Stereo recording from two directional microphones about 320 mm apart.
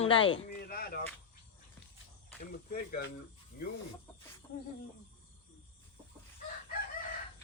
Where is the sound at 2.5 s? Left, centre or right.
Left.